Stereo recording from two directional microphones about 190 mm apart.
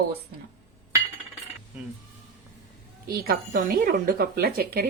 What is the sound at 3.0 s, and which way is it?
A woman's voice, 50° right (ahead or behind).